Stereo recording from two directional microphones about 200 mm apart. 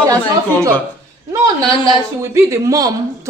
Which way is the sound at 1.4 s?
15° right (ahead or behind).